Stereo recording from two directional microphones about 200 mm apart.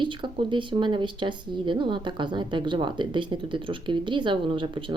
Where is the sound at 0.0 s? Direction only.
25° right (ahead or behind).